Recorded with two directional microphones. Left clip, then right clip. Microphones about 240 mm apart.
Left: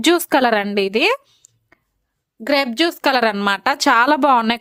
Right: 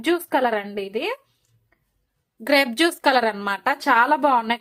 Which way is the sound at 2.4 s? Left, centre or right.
Centre.